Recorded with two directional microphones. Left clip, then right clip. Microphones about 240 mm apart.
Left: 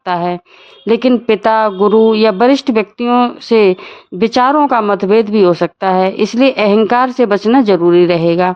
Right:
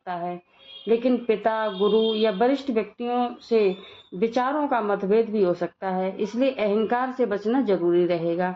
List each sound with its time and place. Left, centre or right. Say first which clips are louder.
0.0 s a woman's voice: left 14 dB; left